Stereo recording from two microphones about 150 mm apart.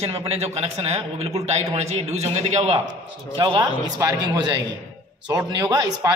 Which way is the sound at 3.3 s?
30° right (ahead or behind).